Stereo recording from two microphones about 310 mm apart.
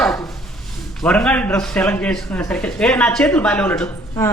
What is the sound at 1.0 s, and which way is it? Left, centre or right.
A man's voice, centre.